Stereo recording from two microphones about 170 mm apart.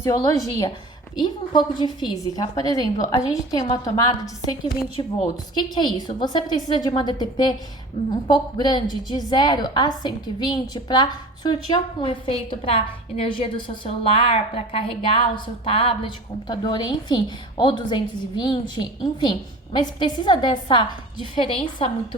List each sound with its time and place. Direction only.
0.0 s a woman's voice: 20° left (ahead or behind); by 22.0 s 35° left (ahead or behind)